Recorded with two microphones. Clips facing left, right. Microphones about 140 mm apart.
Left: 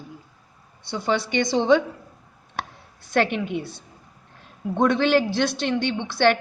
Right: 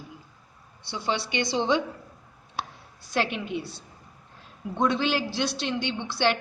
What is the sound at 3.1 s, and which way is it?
A man's voice, 55° left (ahead or behind).